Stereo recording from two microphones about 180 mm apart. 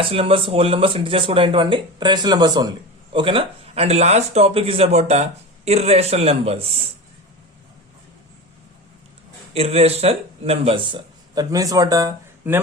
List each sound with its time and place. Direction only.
0.0 s speech: 30° right (ahead or behind)
9.6 s speech: 35° right (ahead or behind)